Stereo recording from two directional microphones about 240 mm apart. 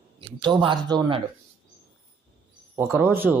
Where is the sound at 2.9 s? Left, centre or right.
Centre.